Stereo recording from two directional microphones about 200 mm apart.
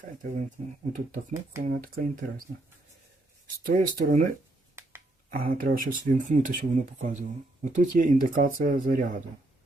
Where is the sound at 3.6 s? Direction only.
45° right (ahead or behind).